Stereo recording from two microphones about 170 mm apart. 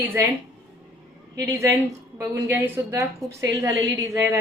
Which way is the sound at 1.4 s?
15° right (ahead or behind).